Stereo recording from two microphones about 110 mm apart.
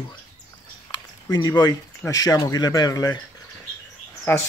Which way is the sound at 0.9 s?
35° left (ahead or behind).